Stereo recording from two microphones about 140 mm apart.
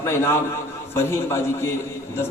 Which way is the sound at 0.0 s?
20° left (ahead or behind).